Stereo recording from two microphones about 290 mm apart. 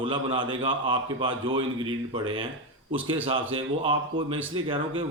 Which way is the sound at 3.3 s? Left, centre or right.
Centre.